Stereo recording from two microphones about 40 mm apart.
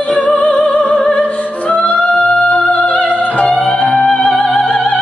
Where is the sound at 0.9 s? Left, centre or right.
Left.